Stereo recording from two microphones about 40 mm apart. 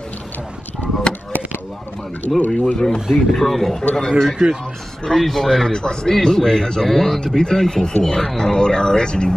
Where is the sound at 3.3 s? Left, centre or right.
Centre.